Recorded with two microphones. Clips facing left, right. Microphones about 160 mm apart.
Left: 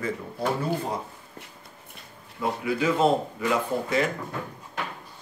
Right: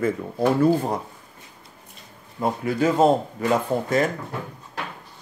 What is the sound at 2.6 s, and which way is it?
Speech, 45° right (ahead or behind).